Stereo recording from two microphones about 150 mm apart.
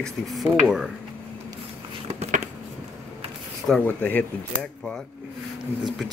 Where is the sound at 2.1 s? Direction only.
45° right (ahead or behind).